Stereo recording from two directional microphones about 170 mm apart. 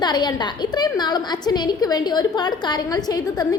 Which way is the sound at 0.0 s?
25° left (ahead or behind).